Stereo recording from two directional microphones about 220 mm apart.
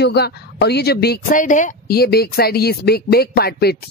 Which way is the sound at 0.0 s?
50° left (ahead or behind).